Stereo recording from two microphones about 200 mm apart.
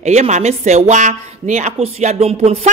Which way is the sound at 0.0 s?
35° right (ahead or behind).